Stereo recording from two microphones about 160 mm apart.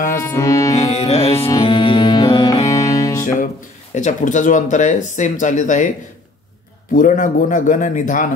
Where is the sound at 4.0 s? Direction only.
50° left (ahead or behind).